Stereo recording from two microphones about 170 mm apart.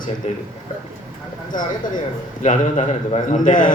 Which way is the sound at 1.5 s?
50° left (ahead or behind).